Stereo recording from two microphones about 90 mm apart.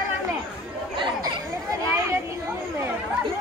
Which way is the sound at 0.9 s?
60° right (ahead or behind).